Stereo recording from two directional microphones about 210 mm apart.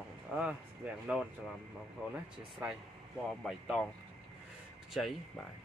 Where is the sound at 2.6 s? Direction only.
10° right (ahead or behind).